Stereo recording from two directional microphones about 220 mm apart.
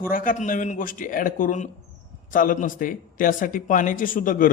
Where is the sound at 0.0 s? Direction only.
40° left (ahead or behind).